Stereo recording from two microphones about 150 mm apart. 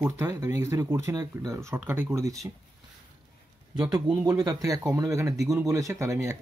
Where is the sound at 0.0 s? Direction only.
20° right (ahead or behind).